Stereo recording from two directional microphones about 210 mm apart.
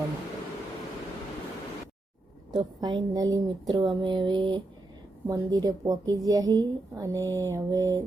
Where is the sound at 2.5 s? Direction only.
20° right (ahead or behind).